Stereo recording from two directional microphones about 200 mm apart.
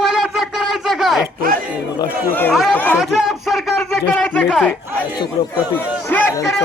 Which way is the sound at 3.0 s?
Centre (ahead or behind).